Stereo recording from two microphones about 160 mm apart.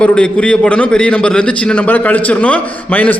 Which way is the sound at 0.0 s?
5° left (ahead or behind).